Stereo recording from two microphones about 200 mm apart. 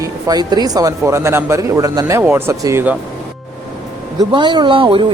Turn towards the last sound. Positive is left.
turn(degrees=-25)  # may be behind; listen again after turning